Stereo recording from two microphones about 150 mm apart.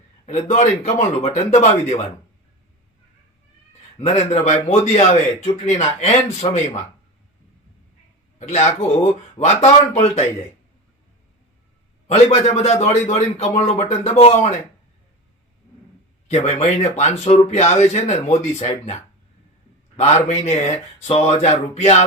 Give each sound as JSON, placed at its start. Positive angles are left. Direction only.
{"t": 0.3, "sound": "a man's voice", "side_deg": 50}
{"t": 4.0, "sound": "a man's voice", "side_deg": 50}
{"t": 8.4, "sound": "a man's voice", "side_deg": 50}
{"t": 12.0, "sound": "a man's voice", "side_deg": 45}
{"t": 16.3, "sound": "a man's voice", "side_deg": 45}
{"t": 20.0, "sound": "a man's voice", "side_deg": 50}